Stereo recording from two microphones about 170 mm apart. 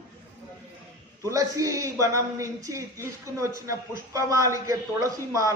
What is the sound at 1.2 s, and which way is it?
A man's voice, 20° right (ahead or behind).